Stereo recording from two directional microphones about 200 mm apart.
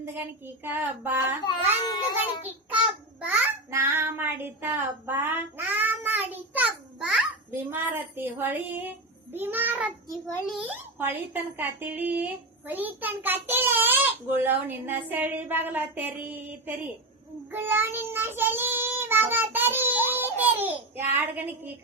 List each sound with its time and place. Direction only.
0.0 s a woman's voice: 10° right (ahead or behind)
1.5 s speech: 20° left (ahead or behind)
3.2 s child singing: 5° right (ahead or behind)
10.5 s a woman's voice: 5° right (ahead or behind)
17.5 s child singing: 10° right (ahead or behind)